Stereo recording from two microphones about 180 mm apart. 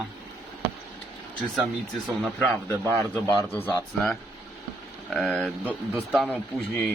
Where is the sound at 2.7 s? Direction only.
15° left (ahead or behind).